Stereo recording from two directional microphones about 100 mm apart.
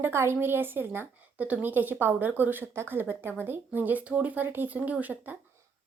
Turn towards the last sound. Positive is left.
turn(degrees=-15)  # may be behind; listen again after turning